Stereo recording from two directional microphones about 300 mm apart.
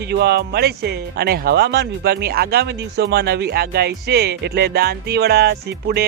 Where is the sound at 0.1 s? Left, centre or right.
Right.